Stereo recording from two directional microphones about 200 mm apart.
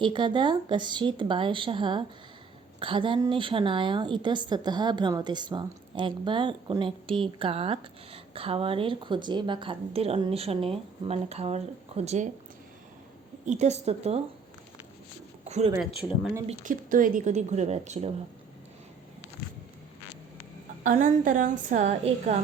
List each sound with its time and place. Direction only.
0.0 s a woman's voice: 25° right (ahead or behind)
13.4 s a woman's voice: 35° right (ahead or behind)
15.4 s speech: 35° right (ahead or behind)
16.0 s speech: centre (ahead or behind)
16.5 s a woman's voice: 40° right (ahead or behind)
20.8 s a woman's voice: 40° right (ahead or behind)